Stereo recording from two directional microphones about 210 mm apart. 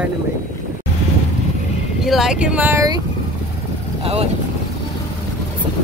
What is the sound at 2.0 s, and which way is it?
Speech, centre (ahead or behind).